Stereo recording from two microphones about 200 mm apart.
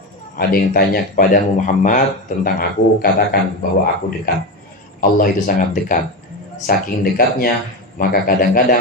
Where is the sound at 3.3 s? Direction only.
50° left (ahead or behind).